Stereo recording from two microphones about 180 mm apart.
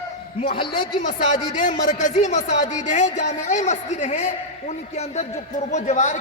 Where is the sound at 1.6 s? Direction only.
40° left (ahead or behind).